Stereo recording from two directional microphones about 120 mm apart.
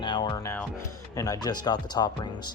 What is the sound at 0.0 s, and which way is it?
Music, 40° left (ahead or behind).